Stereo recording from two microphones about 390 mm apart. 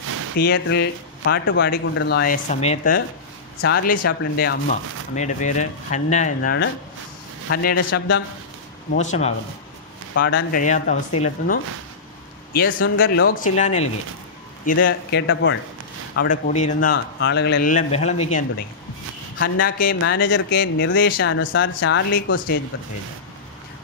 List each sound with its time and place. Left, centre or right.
0.4 s speech: left